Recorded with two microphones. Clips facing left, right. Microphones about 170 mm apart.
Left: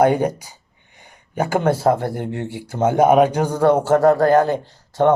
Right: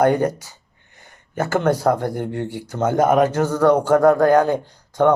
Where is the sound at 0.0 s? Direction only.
10° left (ahead or behind).